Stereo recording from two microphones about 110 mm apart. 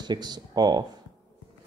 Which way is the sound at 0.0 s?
40° right (ahead or behind).